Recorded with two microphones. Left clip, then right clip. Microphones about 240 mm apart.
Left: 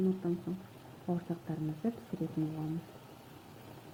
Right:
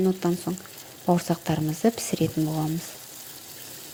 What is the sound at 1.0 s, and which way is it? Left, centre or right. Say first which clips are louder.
Speech: right 15 dB; right.